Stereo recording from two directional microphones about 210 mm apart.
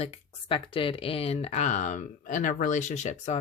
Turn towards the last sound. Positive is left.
turn(degrees=35)  # may be behind; listen again after turning